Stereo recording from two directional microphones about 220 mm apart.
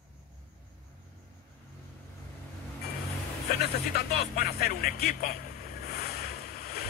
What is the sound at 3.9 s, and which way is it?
Vehicle, 45° left (ahead or behind).